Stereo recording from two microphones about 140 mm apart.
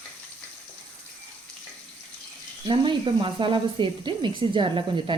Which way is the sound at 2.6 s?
35° right (ahead or behind).